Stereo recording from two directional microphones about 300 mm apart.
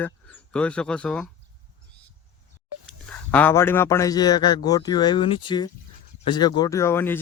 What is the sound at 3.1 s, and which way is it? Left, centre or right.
A man's voice, centre.